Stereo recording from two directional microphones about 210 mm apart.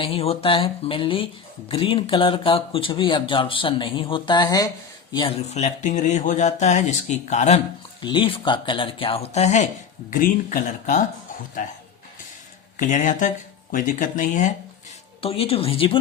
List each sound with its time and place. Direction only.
0.0 s speech: 25° left (ahead or behind)
8.0 s speech: 25° left (ahead or behind)
12.7 s speech: 35° left (ahead or behind)